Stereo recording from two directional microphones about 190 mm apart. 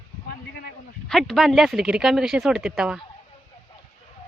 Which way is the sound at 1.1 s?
Centre (ahead or behind).